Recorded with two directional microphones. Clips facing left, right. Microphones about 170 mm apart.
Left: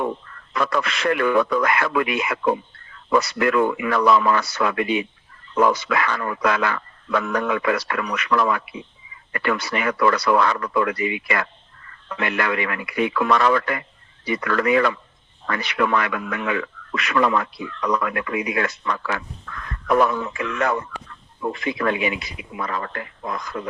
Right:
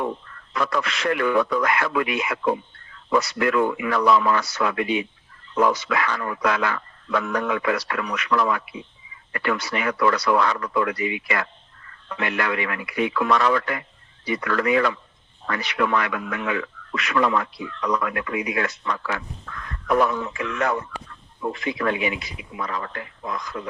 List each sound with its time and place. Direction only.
0.5 s speech: 60° left (ahead or behind)